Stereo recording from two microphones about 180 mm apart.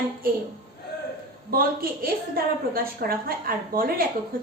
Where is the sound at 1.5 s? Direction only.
55° right (ahead or behind).